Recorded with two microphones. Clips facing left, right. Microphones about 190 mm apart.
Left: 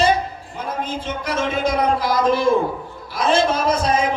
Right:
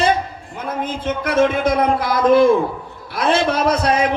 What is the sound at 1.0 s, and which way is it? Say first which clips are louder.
A man's voice: right 9 dB; 55° right (ahead or behind).